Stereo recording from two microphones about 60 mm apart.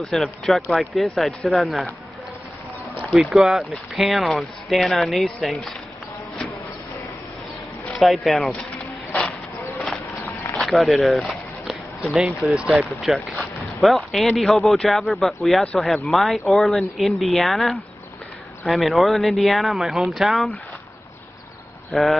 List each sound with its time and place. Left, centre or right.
0.0 s speech: centre
3.2 s speech: centre
8.0 s speech: centre
10.6 s speech: centre
21.9 s speech: centre